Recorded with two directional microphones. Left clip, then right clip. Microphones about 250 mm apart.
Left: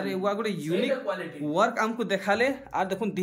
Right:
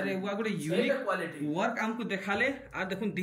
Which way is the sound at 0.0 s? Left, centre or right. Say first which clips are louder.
Left 5 dB; centre.